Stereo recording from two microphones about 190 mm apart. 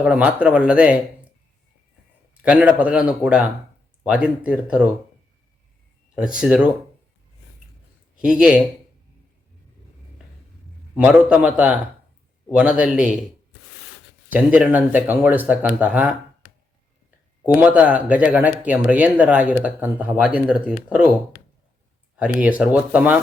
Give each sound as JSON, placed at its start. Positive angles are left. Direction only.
{"t": 0.0, "sound": "speech", "side_deg": -5}
{"t": 2.3, "sound": "speech", "side_deg": -5}
{"t": 6.4, "sound": "speech", "side_deg": -5}
{"t": 8.2, "sound": "speech", "side_deg": -5}
{"t": 10.9, "sound": "speech", "side_deg": -5}
{"t": 14.3, "sound": "speech", "side_deg": -5}
{"t": 17.4, "sound": "speech", "side_deg": -10}
{"t": 22.2, "sound": "speech", "side_deg": -5}